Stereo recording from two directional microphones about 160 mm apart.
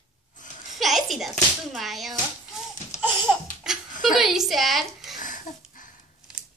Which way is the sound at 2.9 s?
45° left (ahead or behind).